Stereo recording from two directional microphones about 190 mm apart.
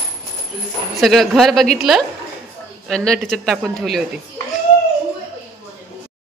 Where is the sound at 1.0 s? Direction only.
Centre (ahead or behind).